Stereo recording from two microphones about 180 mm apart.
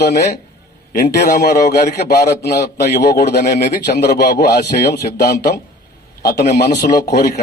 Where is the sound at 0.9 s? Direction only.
60° left (ahead or behind).